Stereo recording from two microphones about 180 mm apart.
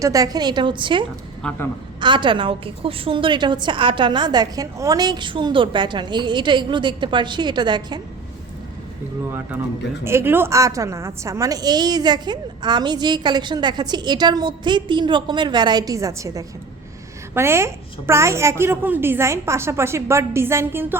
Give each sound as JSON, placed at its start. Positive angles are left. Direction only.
{"t": 0.0, "sound": "a woman's voice", "side_deg": -20}
{"t": 1.4, "sound": "a man's voice", "side_deg": 5}
{"t": 2.0, "sound": "a woman's voice", "side_deg": -25}
{"t": 10.0, "sound": "a woman's voice", "side_deg": -15}